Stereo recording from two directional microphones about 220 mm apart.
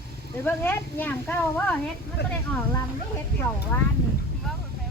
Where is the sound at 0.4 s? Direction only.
10° left (ahead or behind).